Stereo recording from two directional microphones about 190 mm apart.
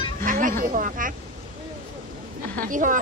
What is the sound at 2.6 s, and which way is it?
Speech, 45° right (ahead or behind).